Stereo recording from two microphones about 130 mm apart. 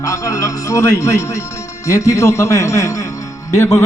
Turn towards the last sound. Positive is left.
turn(degrees=25)  # may be behind; listen again after turning